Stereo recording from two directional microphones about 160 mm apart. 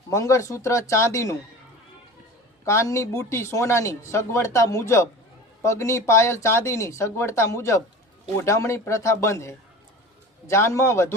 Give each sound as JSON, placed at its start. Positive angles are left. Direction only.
{"t": 0.1, "sound": "speech", "side_deg": 20}
{"t": 2.6, "sound": "speech", "side_deg": 20}